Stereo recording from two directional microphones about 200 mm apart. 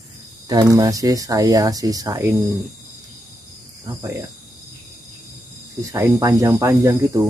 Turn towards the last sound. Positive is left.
turn(degrees=-15)  # may be behind; listen again after turning